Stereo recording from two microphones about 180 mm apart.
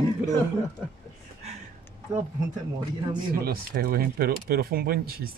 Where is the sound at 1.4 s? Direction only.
35° right (ahead or behind).